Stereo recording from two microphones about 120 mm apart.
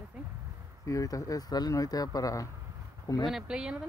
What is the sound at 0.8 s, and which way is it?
Speech, 25° left (ahead or behind).